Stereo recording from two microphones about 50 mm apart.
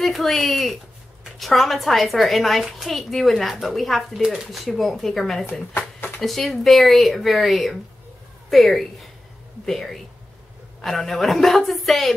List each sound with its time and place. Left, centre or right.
0.0 s speech: centre
4.1 s speech: centre
4.6 s speech: centre
5.5 s speech: left
6.2 s speech: centre